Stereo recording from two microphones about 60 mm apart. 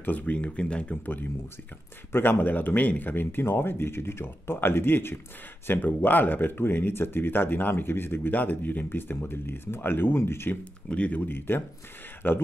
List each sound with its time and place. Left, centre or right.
0.0 s speech: left
2.1 s speech: left
10.6 s speech: left